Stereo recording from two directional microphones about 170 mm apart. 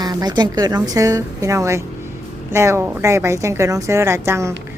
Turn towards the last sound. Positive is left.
turn(degrees=-15)  # may be behind; listen again after turning